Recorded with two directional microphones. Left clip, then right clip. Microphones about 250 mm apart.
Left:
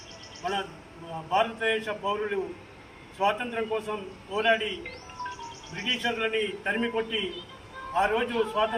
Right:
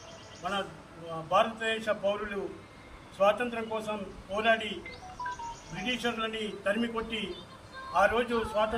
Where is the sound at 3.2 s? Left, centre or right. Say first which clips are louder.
Right 1 dB; left.